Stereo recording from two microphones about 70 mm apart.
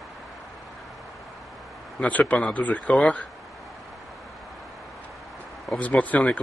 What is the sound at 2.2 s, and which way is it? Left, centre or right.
Speech, centre.